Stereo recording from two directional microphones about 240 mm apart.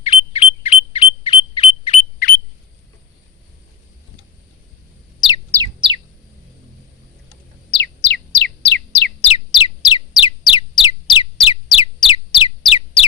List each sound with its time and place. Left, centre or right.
0.0 s bird: left
5.5 s bird: centre
7.7 s bird: left
9.2 s a sound: left